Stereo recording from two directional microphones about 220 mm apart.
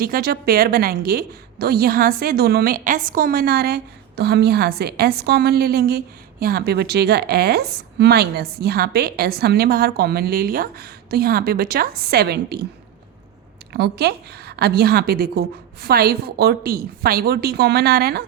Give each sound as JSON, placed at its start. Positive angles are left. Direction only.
{"t": 0.0, "sound": "a woman's voice", "side_deg": -45}
{"t": 13.7, "sound": "a woman's voice", "side_deg": -45}